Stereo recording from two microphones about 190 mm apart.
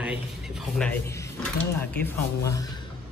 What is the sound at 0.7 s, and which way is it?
Speech, 5° left (ahead or behind).